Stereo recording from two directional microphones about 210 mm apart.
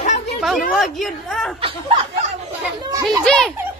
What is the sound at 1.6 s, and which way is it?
Speech, 25° right (ahead or behind).